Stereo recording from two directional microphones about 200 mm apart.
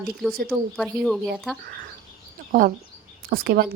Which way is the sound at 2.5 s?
45° right (ahead or behind).